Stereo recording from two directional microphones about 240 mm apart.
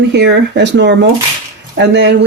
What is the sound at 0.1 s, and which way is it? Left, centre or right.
Speech, right.